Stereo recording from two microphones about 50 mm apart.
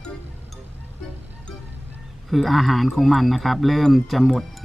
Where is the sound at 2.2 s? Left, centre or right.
Centre.